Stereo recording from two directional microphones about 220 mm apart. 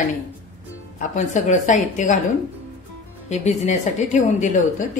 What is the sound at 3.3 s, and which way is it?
A woman's voice, 30° left (ahead or behind).